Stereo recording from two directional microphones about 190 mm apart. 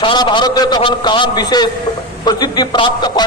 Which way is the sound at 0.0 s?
25° left (ahead or behind).